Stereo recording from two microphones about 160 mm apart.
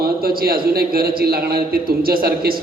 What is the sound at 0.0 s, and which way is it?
A man's voice, 70° right (ahead or behind).